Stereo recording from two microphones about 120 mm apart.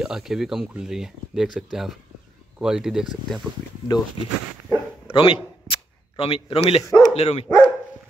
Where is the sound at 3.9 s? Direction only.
35° left (ahead or behind).